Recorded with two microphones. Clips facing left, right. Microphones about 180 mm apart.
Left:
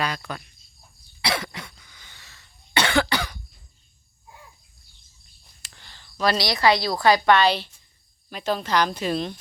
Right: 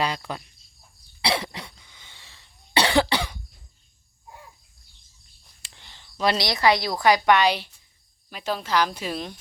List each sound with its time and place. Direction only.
0.3 s speech: 30° right (ahead or behind)
1.2 s cough: 30° right (ahead or behind)
5.6 s a sound: 20° right (ahead or behind)
7.0 s speech: 15° right (ahead or behind)